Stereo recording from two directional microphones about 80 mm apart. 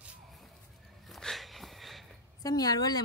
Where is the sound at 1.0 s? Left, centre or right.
Centre.